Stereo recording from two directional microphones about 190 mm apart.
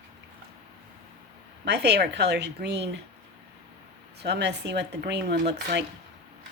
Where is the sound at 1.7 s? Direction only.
65° right (ahead or behind).